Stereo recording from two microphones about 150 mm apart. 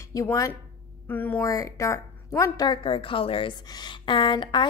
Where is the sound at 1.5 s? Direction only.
20° left (ahead or behind).